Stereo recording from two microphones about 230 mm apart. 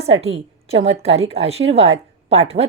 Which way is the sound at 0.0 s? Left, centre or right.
Right.